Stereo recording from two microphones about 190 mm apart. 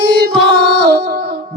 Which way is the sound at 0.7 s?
60° right (ahead or behind).